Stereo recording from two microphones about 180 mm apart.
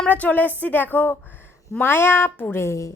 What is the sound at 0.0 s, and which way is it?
Speech, 10° left (ahead or behind).